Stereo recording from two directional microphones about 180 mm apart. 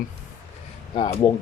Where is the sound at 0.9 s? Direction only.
20° left (ahead or behind).